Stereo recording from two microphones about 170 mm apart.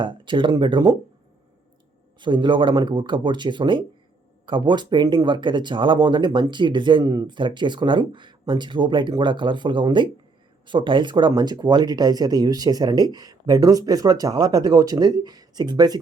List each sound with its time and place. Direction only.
0.0 s speech: 30° right (ahead or behind)
2.1 s speech: 25° right (ahead or behind)